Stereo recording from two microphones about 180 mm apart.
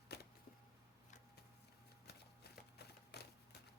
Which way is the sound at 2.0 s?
65° left (ahead or behind).